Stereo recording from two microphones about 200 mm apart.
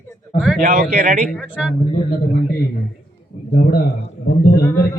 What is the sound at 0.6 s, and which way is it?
Speech, 45° right (ahead or behind).